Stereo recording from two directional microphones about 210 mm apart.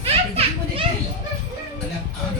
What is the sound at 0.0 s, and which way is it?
Children playing, 30° right (ahead or behind).